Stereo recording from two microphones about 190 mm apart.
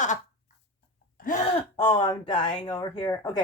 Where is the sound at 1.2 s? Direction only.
40° left (ahead or behind).